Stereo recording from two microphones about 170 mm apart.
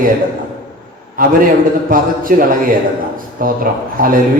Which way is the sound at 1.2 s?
55° right (ahead or behind).